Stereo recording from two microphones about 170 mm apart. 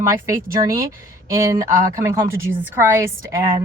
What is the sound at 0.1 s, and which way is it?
Speech, 15° right (ahead or behind).